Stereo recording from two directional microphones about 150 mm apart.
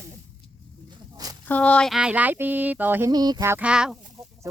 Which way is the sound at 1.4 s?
10° left (ahead or behind).